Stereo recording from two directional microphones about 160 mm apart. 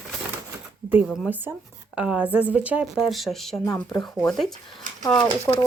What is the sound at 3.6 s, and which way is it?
Speech, 15° left (ahead or behind).